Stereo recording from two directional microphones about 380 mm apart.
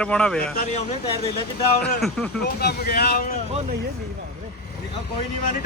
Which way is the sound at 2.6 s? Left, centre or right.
Left.